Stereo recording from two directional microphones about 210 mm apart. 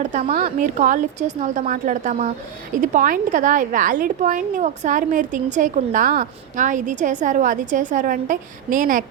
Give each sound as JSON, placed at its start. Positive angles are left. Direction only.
{"t": 0.0, "sound": "a woman's voice", "side_deg": -35}